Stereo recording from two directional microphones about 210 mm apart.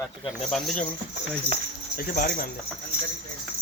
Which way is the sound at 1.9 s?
45° left (ahead or behind).